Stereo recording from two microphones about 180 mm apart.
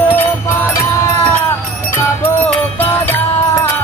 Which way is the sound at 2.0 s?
10° left (ahead or behind).